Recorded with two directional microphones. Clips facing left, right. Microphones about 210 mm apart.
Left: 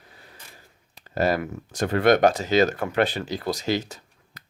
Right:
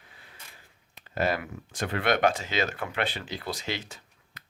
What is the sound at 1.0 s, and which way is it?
Speech, 40° left (ahead or behind).